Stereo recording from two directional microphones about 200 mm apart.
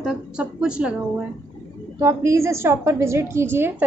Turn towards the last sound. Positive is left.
turn(degrees=-10)  # may be behind; listen again after turning